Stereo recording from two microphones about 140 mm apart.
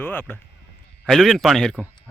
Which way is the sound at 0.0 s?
10° left (ahead or behind).